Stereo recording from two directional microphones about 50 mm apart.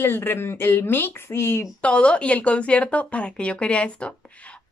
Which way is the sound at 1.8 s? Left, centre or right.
Left.